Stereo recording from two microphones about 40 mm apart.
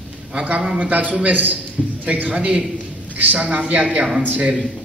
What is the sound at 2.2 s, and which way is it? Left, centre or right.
Speech, right.